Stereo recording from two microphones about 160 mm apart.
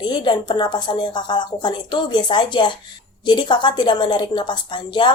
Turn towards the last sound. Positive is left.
turn(degrees=30)  # may be behind; listen again after turning